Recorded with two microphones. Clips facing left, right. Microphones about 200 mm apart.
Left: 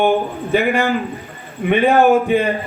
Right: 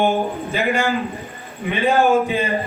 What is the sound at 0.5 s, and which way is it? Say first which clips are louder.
A man's voice: left 5 dB; 60° left (ahead or behind).